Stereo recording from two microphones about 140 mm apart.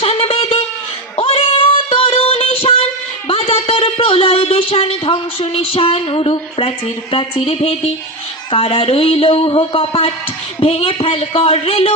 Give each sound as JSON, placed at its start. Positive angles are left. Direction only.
{"t": 0.0, "sound": "a sound", "side_deg": 45}
{"t": 1.1, "sound": "child singing", "side_deg": 45}
{"t": 3.2, "sound": "speech", "side_deg": 40}